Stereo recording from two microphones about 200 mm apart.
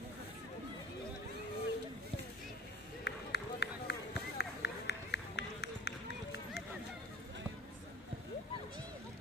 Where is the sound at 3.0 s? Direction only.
55° left (ahead or behind).